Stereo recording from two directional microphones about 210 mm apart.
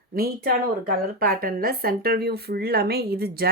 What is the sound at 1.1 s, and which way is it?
Speech, 45° right (ahead or behind).